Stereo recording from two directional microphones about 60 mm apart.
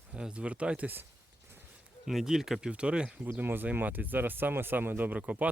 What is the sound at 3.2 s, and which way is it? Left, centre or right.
Speech, right.